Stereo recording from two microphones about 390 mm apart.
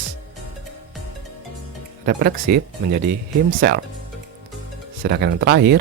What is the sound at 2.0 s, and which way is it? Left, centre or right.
Speech, right.